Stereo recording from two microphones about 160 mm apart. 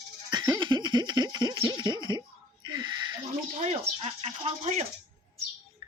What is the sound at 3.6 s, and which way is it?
Speech, 45° right (ahead or behind).